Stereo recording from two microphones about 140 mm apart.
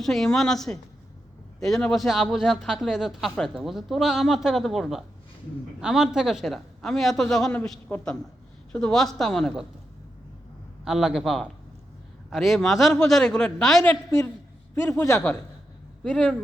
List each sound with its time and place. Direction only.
0.0 s speech: centre (ahead or behind)
10.8 s speech: 5° right (ahead or behind)
13.9 s a woman's voice: 20° left (ahead or behind)